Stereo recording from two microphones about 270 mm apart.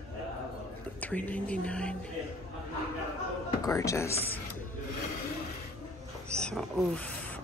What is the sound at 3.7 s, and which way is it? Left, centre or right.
Speech, centre.